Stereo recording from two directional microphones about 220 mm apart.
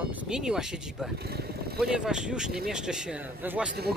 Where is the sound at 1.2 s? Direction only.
45° right (ahead or behind).